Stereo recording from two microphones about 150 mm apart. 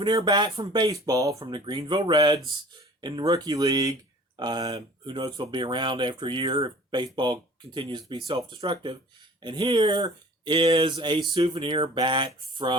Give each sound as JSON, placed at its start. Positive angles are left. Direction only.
{"t": 0.2, "sound": "speech", "side_deg": -30}